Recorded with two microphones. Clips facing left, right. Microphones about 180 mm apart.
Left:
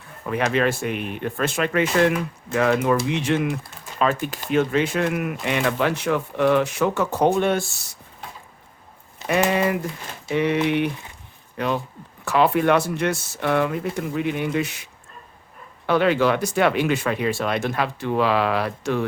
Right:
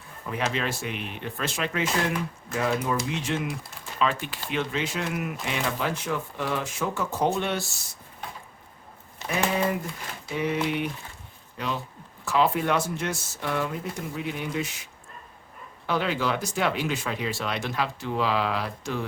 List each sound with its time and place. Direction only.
0.3 s speech: 60° left (ahead or behind)
3.9 s speech: 45° left (ahead or behind)
9.2 s speech: 75° left (ahead or behind)
11.5 s speech: 60° left (ahead or behind)
15.9 s speech: 65° left (ahead or behind)